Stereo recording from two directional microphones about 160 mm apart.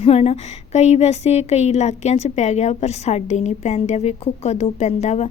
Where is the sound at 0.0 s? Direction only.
40° left (ahead or behind).